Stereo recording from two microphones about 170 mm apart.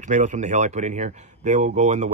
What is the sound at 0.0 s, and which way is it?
A man's voice, 45° right (ahead or behind).